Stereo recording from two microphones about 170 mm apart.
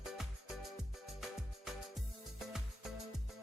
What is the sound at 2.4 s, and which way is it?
Music, 5° right (ahead or behind).